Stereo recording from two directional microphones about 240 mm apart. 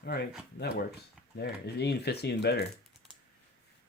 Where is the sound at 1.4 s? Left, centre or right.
Left.